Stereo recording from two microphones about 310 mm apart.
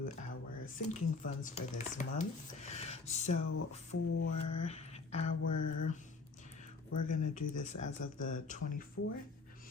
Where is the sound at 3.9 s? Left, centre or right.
Left.